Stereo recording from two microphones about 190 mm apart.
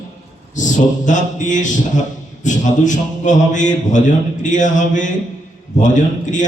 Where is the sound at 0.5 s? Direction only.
40° left (ahead or behind).